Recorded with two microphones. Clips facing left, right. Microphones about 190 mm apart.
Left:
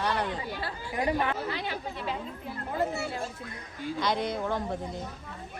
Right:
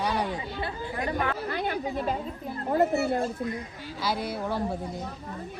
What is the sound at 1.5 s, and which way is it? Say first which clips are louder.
Chatter: right 6 dB; 50° right (ahead or behind).